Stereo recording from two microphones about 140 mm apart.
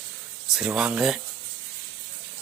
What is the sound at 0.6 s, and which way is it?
Speech, 5° right (ahead or behind).